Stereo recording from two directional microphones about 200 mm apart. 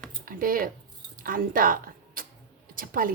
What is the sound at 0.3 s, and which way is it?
Speech, 45° right (ahead or behind).